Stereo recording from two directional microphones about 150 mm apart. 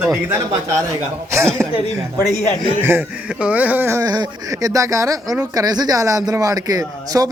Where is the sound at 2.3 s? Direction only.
50° left (ahead or behind).